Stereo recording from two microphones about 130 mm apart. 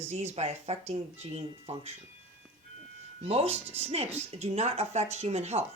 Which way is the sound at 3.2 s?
50° right (ahead or behind).